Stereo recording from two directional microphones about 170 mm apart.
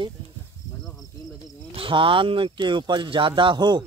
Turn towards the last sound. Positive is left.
turn(degrees=-25)  # may be behind; listen again after turning